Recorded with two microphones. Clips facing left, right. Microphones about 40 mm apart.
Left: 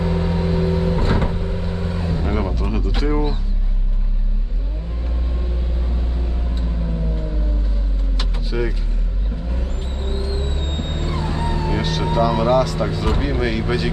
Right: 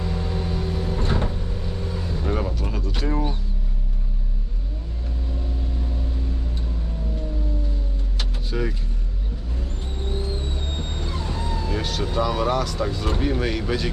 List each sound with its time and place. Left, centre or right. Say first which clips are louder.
0.0 s vehicle: left 7 dB; left
2.6 s speech: left 5 dB; centre
8.2 s vehicle: left 3 dB; centre
10.0 s vehicle: left 3 dB; left
11.8 s vehicle: left 4 dB; centre
12.1 s speech: left 6 dB; centre